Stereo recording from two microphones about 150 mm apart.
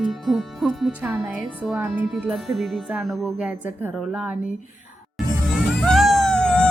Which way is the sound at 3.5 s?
10° right (ahead or behind).